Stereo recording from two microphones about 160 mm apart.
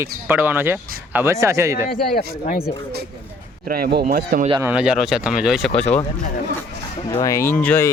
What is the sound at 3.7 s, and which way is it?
Speech, 80° right.